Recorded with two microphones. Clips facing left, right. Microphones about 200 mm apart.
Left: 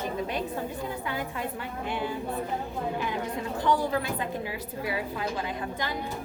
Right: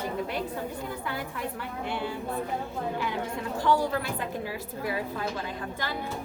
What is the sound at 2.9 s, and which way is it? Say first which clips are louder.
A woman's voice: left 1 dB; 20° left (ahead or behind).